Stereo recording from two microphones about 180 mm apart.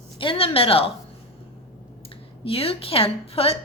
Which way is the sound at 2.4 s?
30° left (ahead or behind).